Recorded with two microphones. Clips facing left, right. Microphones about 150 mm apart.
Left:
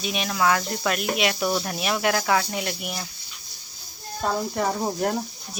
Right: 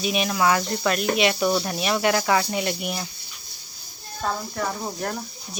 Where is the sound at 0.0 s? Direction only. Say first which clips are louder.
Right 2 dB; centre (ahead or behind).